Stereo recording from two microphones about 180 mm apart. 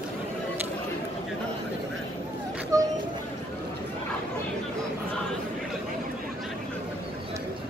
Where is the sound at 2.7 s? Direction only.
20° right (ahead or behind).